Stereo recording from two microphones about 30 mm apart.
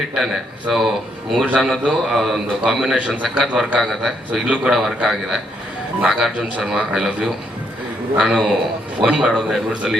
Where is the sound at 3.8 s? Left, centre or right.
Centre.